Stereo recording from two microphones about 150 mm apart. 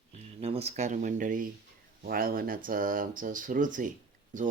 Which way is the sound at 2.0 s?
75° right (ahead or behind).